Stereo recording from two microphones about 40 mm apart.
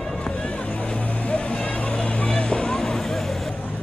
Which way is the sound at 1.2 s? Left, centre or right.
Left.